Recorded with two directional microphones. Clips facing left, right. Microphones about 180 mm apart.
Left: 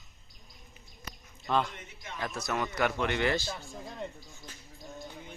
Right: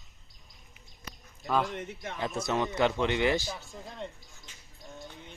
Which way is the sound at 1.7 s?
60° right (ahead or behind).